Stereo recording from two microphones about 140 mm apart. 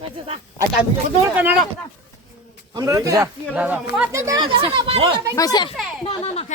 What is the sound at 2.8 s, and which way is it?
Speech, 25° right (ahead or behind).